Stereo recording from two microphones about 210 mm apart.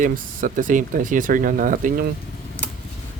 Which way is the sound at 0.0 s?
40° right (ahead or behind).